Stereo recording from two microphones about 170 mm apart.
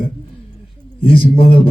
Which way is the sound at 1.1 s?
35° left (ahead or behind).